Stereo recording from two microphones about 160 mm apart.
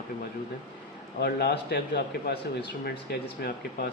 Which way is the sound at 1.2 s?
90° left.